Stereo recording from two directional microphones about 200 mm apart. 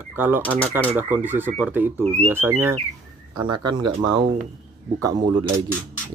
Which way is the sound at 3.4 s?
20° right (ahead or behind).